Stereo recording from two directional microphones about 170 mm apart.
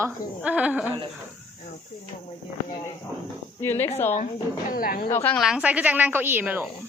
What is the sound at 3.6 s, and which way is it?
Speech, 15° left (ahead or behind).